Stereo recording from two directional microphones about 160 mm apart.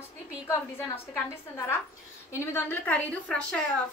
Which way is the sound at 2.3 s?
15° left (ahead or behind).